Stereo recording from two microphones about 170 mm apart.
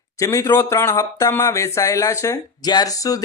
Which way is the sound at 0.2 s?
20° left (ahead or behind).